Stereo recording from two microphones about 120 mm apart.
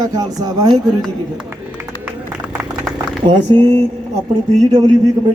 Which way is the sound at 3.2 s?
35° right (ahead or behind).